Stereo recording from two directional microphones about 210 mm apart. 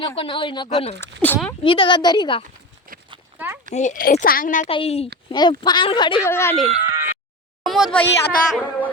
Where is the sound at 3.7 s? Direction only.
35° left (ahead or behind).